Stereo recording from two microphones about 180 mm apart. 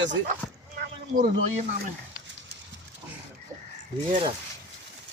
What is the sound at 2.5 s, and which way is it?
Pig, 60° right (ahead or behind).